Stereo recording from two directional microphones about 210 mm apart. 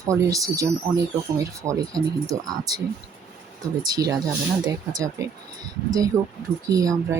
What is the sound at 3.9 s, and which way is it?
Speech, 15° right (ahead or behind).